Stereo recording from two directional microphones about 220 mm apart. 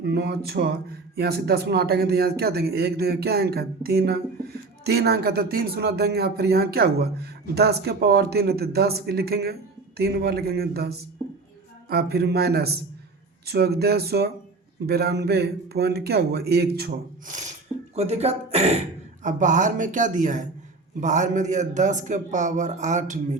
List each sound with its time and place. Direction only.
0.0 s speech: 50° right (ahead or behind); by 23.1 s 35° right (ahead or behind)